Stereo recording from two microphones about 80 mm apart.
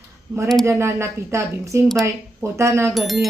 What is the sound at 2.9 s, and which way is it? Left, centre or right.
Speech, centre.